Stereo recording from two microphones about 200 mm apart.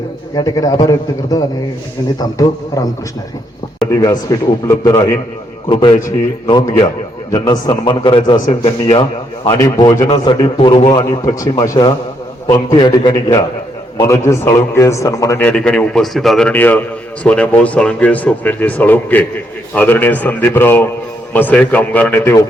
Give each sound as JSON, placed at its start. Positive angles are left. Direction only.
{"t": 0.3, "sound": "a man's voice", "side_deg": 20}
{"t": 3.9, "sound": "a man's voice", "side_deg": 20}
{"t": 5.6, "sound": "a man's voice", "side_deg": 25}